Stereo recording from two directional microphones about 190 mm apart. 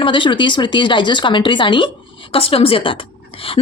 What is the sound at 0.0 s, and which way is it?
Speech, 25° left (ahead or behind).